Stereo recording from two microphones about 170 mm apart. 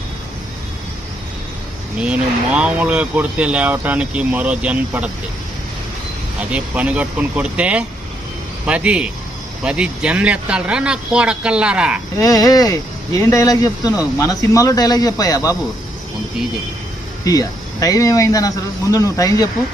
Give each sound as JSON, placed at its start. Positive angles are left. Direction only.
{"t": 2.0, "sound": "speech", "side_deg": -5}
{"t": 6.5, "sound": "speech", "side_deg": -5}
{"t": 12.1, "sound": "speech", "side_deg": 20}
{"t": 17.2, "sound": "speech", "side_deg": 20}